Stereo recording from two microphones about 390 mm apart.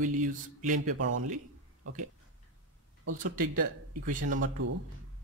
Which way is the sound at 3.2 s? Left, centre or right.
Right.